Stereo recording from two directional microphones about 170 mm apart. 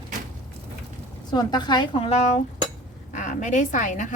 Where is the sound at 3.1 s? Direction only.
50° left (ahead or behind).